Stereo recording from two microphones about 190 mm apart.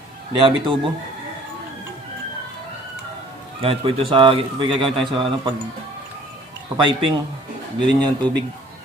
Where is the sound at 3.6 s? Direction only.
30° right (ahead or behind).